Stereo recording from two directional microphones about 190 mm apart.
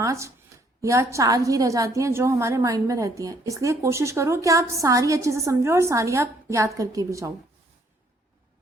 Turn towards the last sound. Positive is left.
turn(degrees=-15)  # may be behind; listen again after turning